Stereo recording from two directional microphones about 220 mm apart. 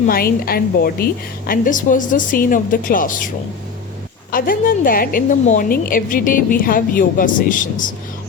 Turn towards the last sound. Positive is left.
turn(degrees=35)  # may be behind; listen again after turning